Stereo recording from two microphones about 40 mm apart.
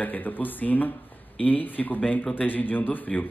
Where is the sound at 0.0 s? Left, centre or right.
Left.